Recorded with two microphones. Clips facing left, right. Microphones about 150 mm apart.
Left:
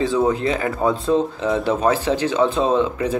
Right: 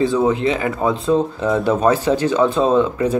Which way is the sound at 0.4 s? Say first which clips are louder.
Right 2 dB; 20° right (ahead or behind).